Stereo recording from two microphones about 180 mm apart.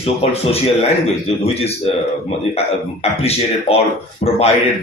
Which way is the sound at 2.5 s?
35° left (ahead or behind).